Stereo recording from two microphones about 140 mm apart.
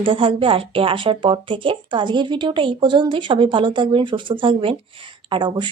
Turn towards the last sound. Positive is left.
turn(degrees=-35)  # may be behind; listen again after turning